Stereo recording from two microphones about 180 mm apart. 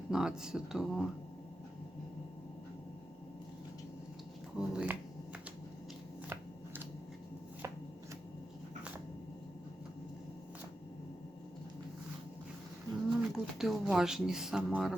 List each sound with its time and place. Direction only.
0.1 s speech: 5° right (ahead or behind)
4.5 s speech: 5° right (ahead or behind)
6.2 s shuffling cards: 10° right (ahead or behind)
13.1 s speech: centre (ahead or behind)